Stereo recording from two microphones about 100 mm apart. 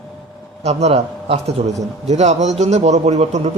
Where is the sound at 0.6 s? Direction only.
90° right.